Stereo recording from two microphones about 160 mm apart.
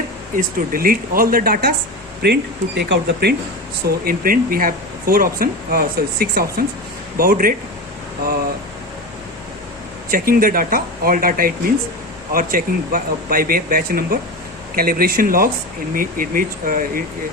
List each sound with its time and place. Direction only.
0.3 s speech: 65° right (ahead or behind)
2.2 s speech: 90° right
3.8 s speech: 65° right (ahead or behind)
10.1 s speech: 65° right (ahead or behind)